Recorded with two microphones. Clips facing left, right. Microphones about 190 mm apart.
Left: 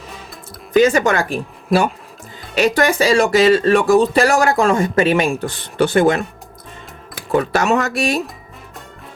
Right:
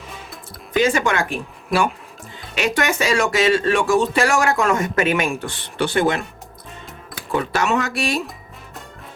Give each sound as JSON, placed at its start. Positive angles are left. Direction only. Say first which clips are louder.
{"t": 0.7, "sound": "speech", "louder": "left 5 dB", "side_deg": 40}
{"t": 7.3, "sound": "speech", "louder": "left 4 dB", "side_deg": 45}